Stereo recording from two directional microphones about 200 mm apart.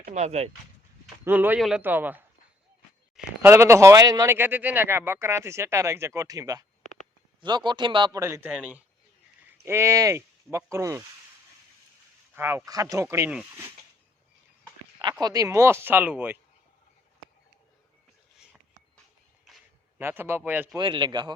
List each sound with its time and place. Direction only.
0.1 s speech: 35° right (ahead or behind)
1.2 s a man's voice: 10° right (ahead or behind)
12.3 s speech: 10° right (ahead or behind)
15.2 s speech: 20° right (ahead or behind)
20.0 s speech: 10° right (ahead or behind)
20.7 s a man's voice: 25° right (ahead or behind)